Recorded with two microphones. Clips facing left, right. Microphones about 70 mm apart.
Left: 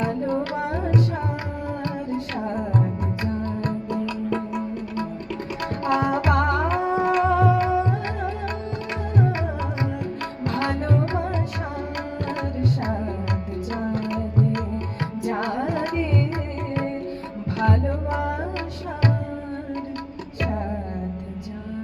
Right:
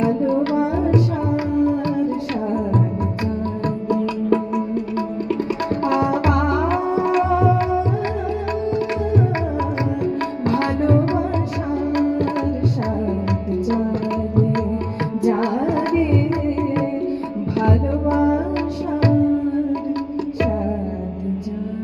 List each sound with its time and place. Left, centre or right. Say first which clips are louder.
6.3 s music: right 3 dB; left
10.6 s tabla: right 5 dB; right
15.9 s tabla: right 7 dB; left